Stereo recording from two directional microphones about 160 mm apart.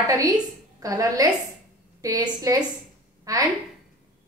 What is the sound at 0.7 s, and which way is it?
A woman's voice, 20° right (ahead or behind).